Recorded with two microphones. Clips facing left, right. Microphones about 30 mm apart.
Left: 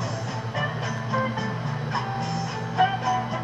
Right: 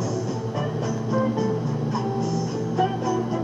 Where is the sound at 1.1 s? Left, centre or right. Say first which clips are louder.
Right 3 dB; left.